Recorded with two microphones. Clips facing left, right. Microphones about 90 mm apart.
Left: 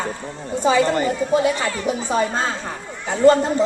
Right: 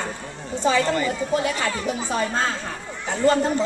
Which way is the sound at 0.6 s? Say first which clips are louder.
Left 3 dB; 20° left (ahead or behind).